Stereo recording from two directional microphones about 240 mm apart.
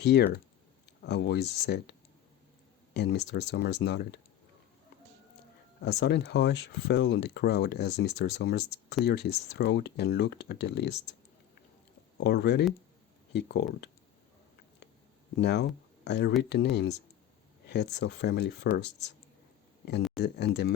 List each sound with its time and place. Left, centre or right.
0.0 s speech: left
5.8 s speech: left
12.1 s speech: left
15.4 s speech: left
20.1 s speech: left